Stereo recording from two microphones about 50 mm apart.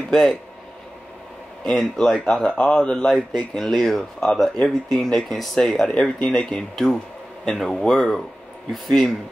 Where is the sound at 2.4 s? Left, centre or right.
Centre.